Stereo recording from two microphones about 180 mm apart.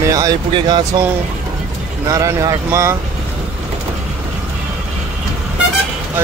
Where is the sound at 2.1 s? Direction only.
20° right (ahead or behind).